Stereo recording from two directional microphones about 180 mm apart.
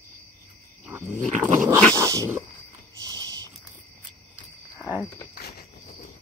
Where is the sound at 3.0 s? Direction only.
20° right (ahead or behind).